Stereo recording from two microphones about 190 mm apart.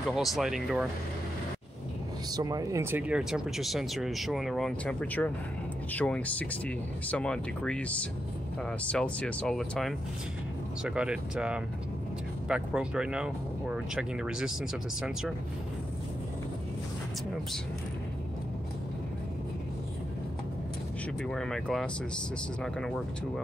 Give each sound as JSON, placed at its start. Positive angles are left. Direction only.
{"t": 0.1, "sound": "speech", "side_deg": 0}
{"t": 2.3, "sound": "speech", "side_deg": -20}
{"t": 21.2, "sound": "speech", "side_deg": 5}